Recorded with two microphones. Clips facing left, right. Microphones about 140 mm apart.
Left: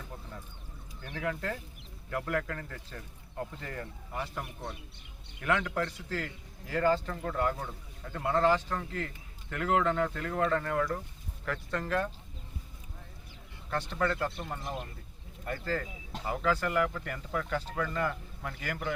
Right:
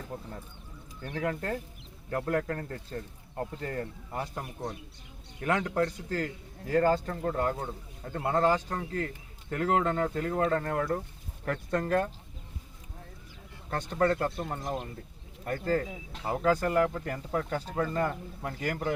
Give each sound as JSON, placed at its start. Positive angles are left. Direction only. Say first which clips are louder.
{"t": 1.1, "sound": "speech", "louder": "right 3 dB", "side_deg": -40}
{"t": 13.9, "sound": "speech", "louder": "right 6 dB", "side_deg": -40}
{"t": 14.6, "sound": "speech", "louder": "right 4 dB", "side_deg": -25}
{"t": 15.4, "sound": "speech", "louder": "right 5 dB", "side_deg": -45}
{"t": 16.2, "sound": "speech", "louder": "right 4 dB", "side_deg": -35}